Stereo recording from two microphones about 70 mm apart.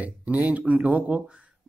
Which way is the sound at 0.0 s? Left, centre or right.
Right.